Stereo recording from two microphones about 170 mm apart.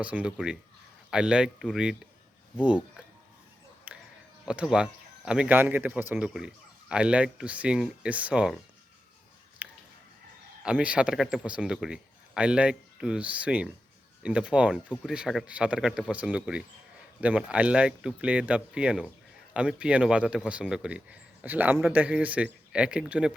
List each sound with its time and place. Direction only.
0.0 s speech: 5° right (ahead or behind)
3.9 s a sound: 10° right (ahead or behind)
4.4 s speech: 5° right (ahead or behind)
9.6 s chicken: 10° right (ahead or behind)
10.6 s speech: 5° right (ahead or behind)